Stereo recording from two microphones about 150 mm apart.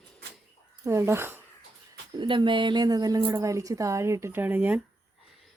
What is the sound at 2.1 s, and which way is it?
A woman's voice, 30° right (ahead or behind).